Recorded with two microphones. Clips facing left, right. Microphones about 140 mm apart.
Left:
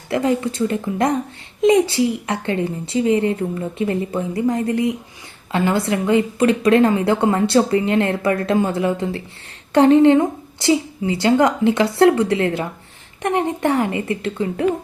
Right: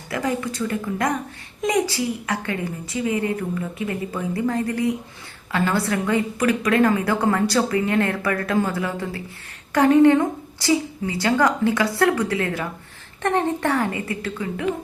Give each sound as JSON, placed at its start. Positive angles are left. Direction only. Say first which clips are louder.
{"t": 0.1, "sound": "a woman's voice", "louder": "left 6 dB", "side_deg": 25}